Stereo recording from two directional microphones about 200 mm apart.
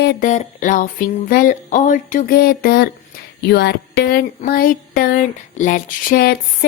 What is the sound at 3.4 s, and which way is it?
Speech, 55° left (ahead or behind).